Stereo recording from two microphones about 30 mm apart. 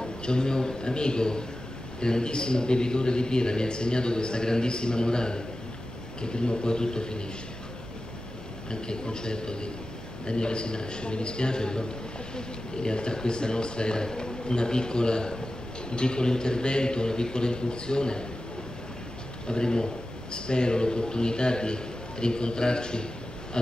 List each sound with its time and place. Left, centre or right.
0.0 s a man's voice: left
8.6 s a man's voice: left
19.4 s a man's voice: left